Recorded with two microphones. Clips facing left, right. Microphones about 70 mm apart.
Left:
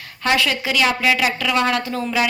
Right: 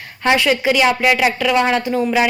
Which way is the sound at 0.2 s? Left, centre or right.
Right.